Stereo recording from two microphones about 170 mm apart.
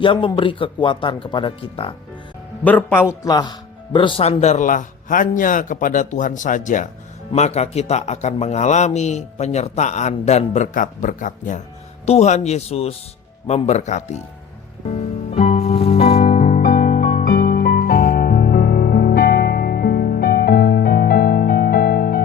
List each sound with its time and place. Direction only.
0.0 s speech: 30° left (ahead or behind)
2.6 s a man's voice: 10° left (ahead or behind); by 14.2 s 40° left (ahead or behind)
14.8 s music: 40° left (ahead or behind); by 22.2 s 60° left (ahead or behind)